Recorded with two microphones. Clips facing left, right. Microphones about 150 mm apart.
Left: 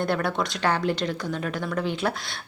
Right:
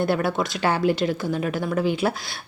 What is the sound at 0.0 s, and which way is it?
Speech, 5° right (ahead or behind).